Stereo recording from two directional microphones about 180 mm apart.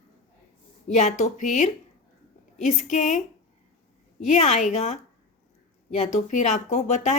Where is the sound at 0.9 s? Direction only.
40° left (ahead or behind).